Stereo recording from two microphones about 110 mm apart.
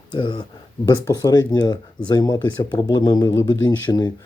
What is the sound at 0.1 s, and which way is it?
Speech, 45° left (ahead or behind).